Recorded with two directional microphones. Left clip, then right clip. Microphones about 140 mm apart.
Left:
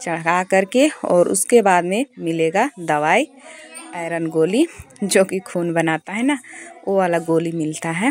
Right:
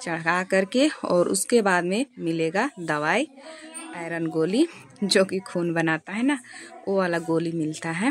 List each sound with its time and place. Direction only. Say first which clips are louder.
0.0 s speech: left 6 dB; 20° left (ahead or behind)